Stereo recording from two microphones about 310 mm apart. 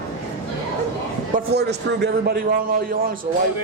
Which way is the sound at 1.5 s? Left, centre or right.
Right.